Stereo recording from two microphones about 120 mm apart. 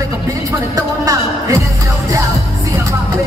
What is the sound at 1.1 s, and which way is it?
Heart murmur, 30° right (ahead or behind).